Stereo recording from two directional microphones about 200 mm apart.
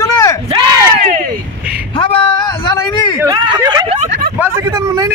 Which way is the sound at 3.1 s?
20° right (ahead or behind).